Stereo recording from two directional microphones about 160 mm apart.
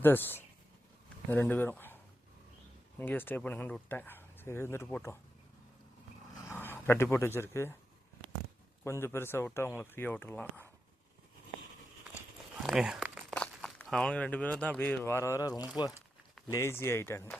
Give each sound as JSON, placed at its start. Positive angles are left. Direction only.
{"t": 0.0, "sound": "speech", "side_deg": 15}
{"t": 3.0, "sound": "speech", "side_deg": 15}
{"t": 6.4, "sound": "speech", "side_deg": 15}
{"t": 8.8, "sound": "speech", "side_deg": 15}
{"t": 12.6, "sound": "speech", "side_deg": 0}
{"t": 13.3, "sound": "speech", "side_deg": 5}